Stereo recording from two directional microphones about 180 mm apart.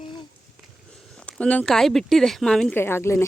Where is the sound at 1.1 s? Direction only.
5° left (ahead or behind).